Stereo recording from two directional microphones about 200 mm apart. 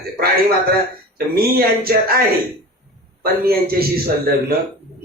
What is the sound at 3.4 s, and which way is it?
Speech, 50° right (ahead or behind).